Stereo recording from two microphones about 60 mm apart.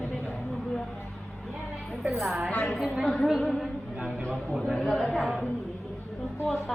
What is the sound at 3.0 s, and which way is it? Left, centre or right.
Speech, centre.